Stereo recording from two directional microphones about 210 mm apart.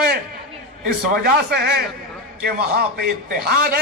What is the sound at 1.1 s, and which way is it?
A man's voice, 45° right (ahead or behind).